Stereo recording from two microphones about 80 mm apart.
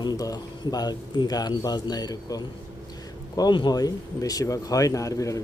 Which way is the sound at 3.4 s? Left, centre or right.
Left.